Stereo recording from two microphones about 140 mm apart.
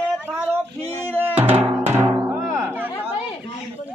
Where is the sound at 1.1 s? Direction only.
15° right (ahead or behind).